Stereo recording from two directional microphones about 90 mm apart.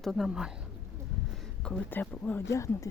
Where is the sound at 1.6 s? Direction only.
20° left (ahead or behind).